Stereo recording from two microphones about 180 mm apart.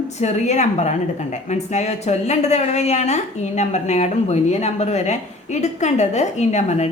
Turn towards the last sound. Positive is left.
turn(degrees=40)  # may be behind; listen again after turning